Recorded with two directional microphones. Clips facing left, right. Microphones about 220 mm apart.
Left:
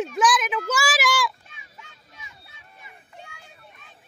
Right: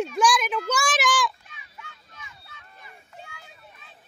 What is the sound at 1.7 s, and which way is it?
Vehicle, 15° left (ahead or behind).